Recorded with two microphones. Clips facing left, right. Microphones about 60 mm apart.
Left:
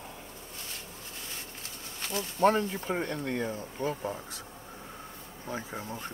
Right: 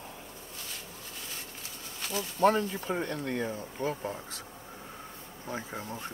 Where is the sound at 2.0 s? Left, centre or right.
Left.